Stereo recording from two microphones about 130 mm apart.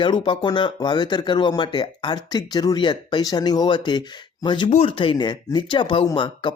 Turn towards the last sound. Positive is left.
turn(degrees=40)  # may be behind; listen again after turning